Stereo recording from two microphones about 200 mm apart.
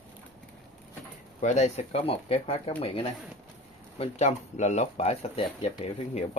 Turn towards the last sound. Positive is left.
turn(degrees=35)  # may be behind; listen again after turning